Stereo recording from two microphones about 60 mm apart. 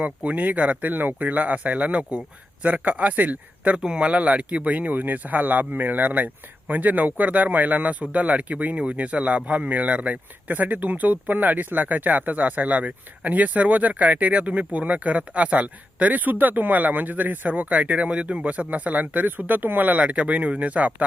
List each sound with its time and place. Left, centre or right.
0.0 s speech: right
3.8 s speech: centre